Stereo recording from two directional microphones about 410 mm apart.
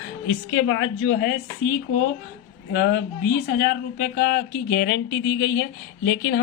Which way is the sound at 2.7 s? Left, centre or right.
Left.